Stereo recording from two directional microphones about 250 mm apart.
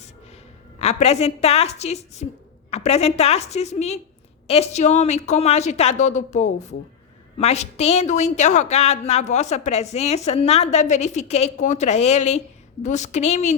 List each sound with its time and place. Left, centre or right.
0.8 s a woman's voice: left